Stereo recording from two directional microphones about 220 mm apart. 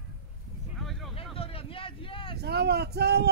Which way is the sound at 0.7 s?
Centre (ahead or behind).